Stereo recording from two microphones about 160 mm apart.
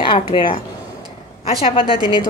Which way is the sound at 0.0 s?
30° left (ahead or behind).